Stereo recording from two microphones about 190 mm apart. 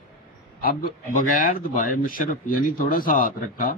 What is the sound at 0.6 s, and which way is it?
A man's voice, 50° left (ahead or behind).